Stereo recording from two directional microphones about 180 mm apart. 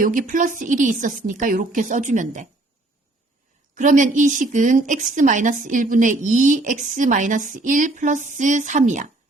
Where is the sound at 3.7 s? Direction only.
45° right (ahead or behind).